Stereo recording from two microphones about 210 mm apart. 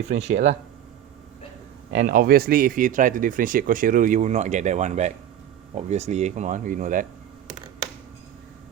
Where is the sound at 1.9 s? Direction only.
40° right (ahead or behind).